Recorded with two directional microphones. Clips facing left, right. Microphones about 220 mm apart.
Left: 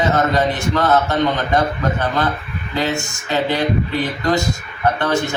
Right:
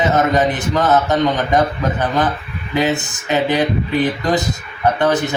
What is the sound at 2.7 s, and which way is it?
Speech, 15° right (ahead or behind).